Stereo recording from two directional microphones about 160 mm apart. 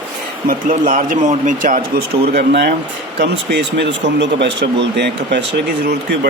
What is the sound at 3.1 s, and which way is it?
Speech, 90° right.